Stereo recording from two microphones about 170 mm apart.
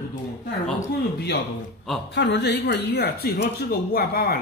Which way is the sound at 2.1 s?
85° left.